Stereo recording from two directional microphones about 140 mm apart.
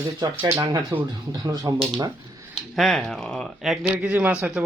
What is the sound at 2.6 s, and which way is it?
Speech, centre (ahead or behind).